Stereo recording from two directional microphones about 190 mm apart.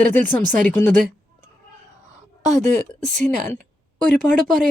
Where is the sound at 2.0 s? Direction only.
35° right (ahead or behind).